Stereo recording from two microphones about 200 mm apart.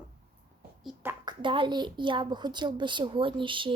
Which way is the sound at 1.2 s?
20° right (ahead or behind).